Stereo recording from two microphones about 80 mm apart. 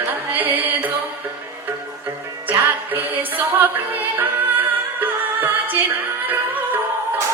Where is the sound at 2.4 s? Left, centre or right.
Right.